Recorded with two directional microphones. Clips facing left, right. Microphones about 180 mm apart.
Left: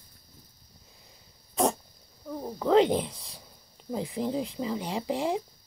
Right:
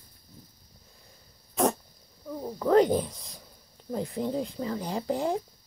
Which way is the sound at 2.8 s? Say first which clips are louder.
Right 1 dB; 25° left (ahead or behind).